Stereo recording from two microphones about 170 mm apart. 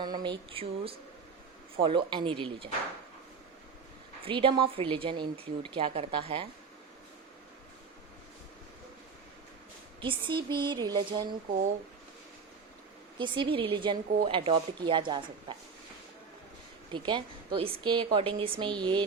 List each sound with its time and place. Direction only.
0.0 s a sound: 25° right (ahead or behind)
1.7 s a woman's voice: 30° right (ahead or behind)
4.2 s a woman's voice: 30° right (ahead or behind)
10.0 s a woman's voice: 30° right (ahead or behind)
13.1 s a woman's voice: 30° right (ahead or behind)
17.1 s a woman's voice: 30° right (ahead or behind)